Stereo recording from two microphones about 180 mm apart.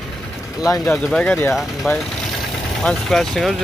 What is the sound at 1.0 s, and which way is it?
Speech, 5° left (ahead or behind).